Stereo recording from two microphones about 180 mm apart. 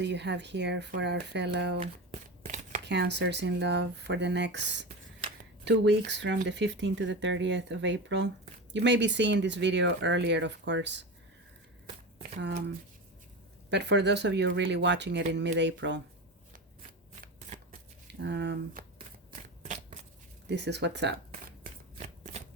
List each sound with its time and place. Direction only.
0.0 s speech: 75° right (ahead or behind)
2.8 s speech: 70° right (ahead or behind)
13.7 s speech: 70° right (ahead or behind)
18.1 s speech: 70° right (ahead or behind)
18.8 s shuffling cards: 55° right (ahead or behind)
19.6 s shuffling cards: 40° right (ahead or behind)
20.5 s speech: 70° right (ahead or behind)
21.9 s shuffling cards: 35° right (ahead or behind)